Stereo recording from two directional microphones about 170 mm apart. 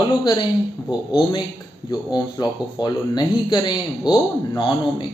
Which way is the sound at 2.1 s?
25° left (ahead or behind).